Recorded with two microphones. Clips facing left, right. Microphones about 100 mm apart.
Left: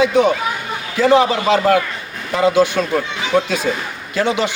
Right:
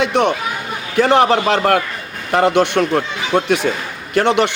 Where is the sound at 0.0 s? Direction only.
70° right (ahead or behind).